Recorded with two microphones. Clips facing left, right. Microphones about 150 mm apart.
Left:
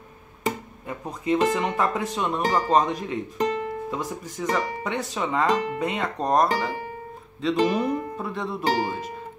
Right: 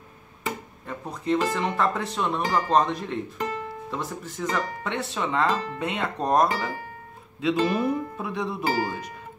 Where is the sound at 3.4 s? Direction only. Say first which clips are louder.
Left 5 dB; 15° left (ahead or behind).